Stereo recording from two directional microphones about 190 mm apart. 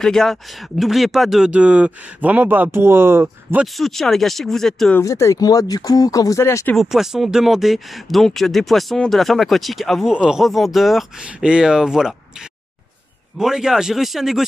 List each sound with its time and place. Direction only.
0.0 s speech: centre (ahead or behind)
3.6 s speech: centre (ahead or behind)
5.0 s speech: 15° left (ahead or behind)
6.8 s speech: centre (ahead or behind)
13.4 s speech: 5° right (ahead or behind)